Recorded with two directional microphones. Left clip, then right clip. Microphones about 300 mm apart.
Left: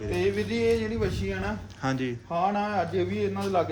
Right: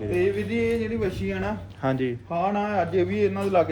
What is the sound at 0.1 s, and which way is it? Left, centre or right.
A man's voice, centre.